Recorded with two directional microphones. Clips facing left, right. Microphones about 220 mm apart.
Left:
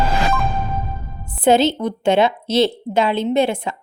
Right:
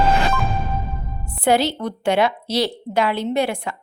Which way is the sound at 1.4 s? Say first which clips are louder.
Left 4 dB; 20° left (ahead or behind).